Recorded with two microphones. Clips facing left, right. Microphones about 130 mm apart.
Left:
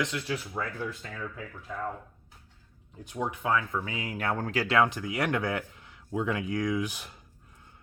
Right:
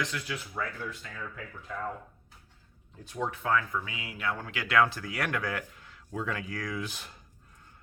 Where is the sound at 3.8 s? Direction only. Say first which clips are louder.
Left 3 dB; 40° left (ahead or behind).